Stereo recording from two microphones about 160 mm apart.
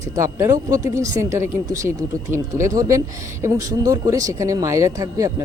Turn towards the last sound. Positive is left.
turn(degrees=-20)  # may be behind; listen again after turning